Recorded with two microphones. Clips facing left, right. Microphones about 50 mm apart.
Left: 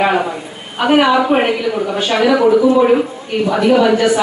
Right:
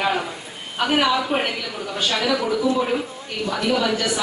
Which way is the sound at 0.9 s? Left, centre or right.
Left.